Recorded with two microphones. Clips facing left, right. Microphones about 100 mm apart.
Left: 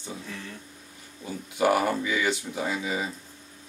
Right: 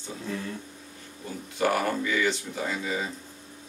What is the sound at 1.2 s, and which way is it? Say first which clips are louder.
Speech: left 3 dB; 10° left (ahead or behind).